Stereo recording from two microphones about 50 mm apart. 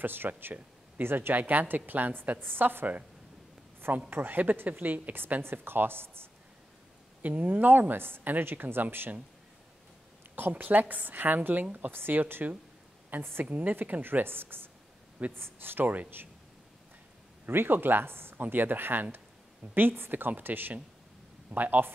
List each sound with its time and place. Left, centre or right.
0.0 s speech: right
1.3 s a woman's voice: right
4.1 s a woman's voice: right
7.2 s a woman's voice: right
10.5 s a woman's voice: right
11.9 s a woman's voice: right
13.5 s a woman's voice: right
17.5 s a woman's voice: right